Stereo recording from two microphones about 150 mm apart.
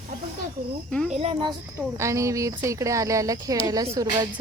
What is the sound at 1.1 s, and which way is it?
Speech, 45° right (ahead or behind).